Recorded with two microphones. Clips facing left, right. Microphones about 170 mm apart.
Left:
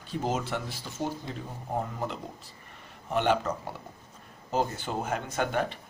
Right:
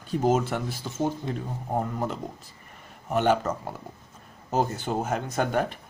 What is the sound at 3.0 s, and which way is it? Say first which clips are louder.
Speech: right 3 dB; 45° right (ahead or behind).